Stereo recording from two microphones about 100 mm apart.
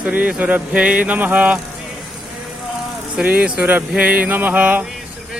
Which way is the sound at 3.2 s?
10° right (ahead or behind).